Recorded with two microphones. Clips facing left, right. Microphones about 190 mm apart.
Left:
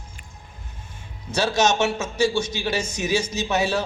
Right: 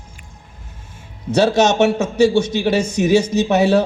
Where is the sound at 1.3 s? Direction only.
60° right (ahead or behind).